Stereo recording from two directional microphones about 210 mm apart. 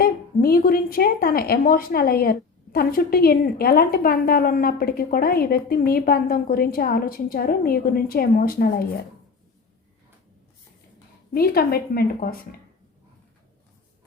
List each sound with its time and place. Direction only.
0.0 s a woman's voice: 45° left (ahead or behind)
11.3 s a woman's voice: 45° left (ahead or behind)